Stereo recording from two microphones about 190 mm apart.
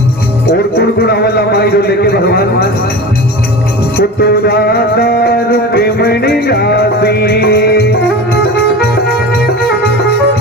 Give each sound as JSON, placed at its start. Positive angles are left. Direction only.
{"t": 0.8, "sound": "speech", "side_deg": 55}
{"t": 3.9, "sound": "music", "side_deg": 55}